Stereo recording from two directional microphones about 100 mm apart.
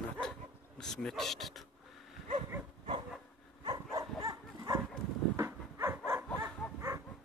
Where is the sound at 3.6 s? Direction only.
40° right (ahead or behind).